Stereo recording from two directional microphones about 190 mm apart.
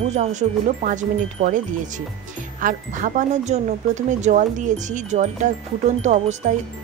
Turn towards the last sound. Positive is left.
turn(degrees=-35)  # may be behind; listen again after turning